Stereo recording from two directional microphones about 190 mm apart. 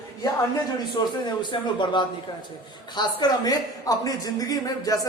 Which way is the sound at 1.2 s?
25° left (ahead or behind).